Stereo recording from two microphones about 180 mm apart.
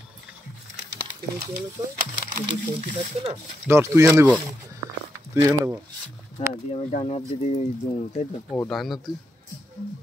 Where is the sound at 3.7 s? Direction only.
15° right (ahead or behind).